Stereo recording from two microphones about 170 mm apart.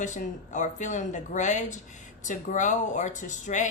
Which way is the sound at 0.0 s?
45° left (ahead or behind).